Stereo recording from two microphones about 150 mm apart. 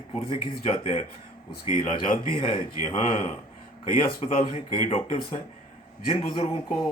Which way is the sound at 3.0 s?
55° left (ahead or behind).